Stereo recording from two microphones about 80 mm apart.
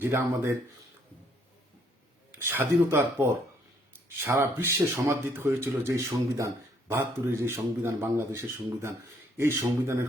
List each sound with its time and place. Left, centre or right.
0.0 s speech: right
2.3 s a man's voice: right
6.9 s speech: right